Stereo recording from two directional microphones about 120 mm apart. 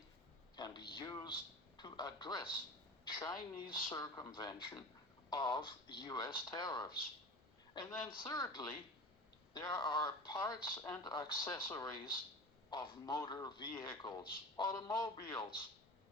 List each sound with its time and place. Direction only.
0.5 s a man's voice: 35° left (ahead or behind)